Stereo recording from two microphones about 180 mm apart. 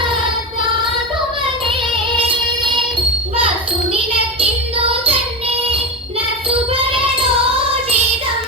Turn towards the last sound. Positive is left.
turn(degrees=-30)  # may be behind; listen again after turning